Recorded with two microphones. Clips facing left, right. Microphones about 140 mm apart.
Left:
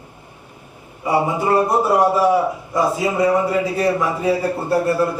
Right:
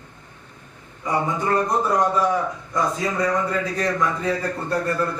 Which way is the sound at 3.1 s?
25° left (ahead or behind).